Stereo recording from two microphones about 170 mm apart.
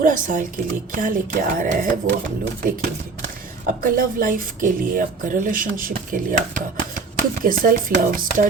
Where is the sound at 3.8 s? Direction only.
55° right (ahead or behind).